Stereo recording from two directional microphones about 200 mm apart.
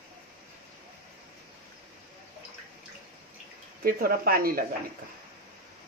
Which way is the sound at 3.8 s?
45° right (ahead or behind).